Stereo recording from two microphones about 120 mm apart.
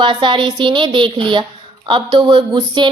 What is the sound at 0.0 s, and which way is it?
A woman's voice, 40° right (ahead or behind).